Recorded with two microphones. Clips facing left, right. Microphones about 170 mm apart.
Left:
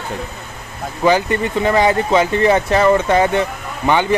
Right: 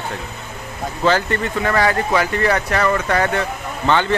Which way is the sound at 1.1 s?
15° left (ahead or behind).